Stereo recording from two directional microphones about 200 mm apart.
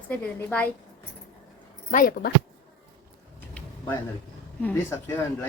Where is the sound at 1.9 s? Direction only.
45° left (ahead or behind).